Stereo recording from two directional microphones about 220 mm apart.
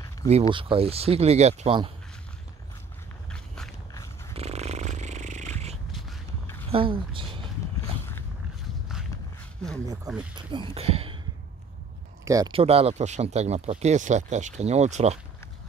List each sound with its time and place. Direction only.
0.3 s speech: 25° right (ahead or behind)
3.3 s walk: 5° left (ahead or behind)
4.4 s a sound: 30° right (ahead or behind)
5.9 s a sound: centre (ahead or behind)
6.7 s a woman's voice: 25° right (ahead or behind)
10.3 s speech: 20° right (ahead or behind)
12.3 s speech: 20° right (ahead or behind)